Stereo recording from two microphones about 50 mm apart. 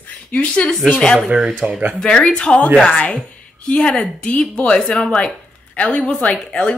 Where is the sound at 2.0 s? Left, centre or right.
Centre.